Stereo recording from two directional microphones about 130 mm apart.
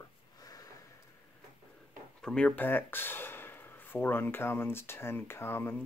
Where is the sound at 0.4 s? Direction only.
30° left (ahead or behind).